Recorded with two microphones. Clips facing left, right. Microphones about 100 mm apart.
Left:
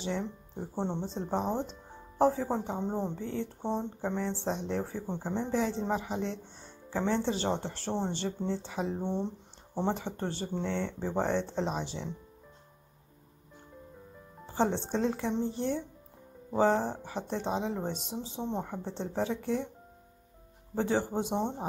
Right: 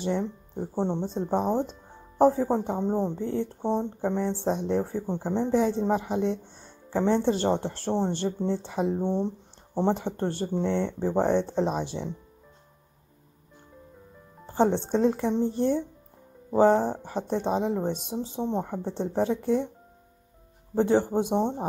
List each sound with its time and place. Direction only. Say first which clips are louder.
1.0 s speech: right 6 dB; 55° right (ahead or behind)
3.6 s speech: right 6 dB; 50° right (ahead or behind)
9.0 s speech: right 6 dB; 90° right
9.9 s speech: right 6 dB; 55° right (ahead or behind)
14.9 s speech: right 6 dB; 55° right (ahead or behind)
20.7 s speech: right 7 dB; 55° right (ahead or behind)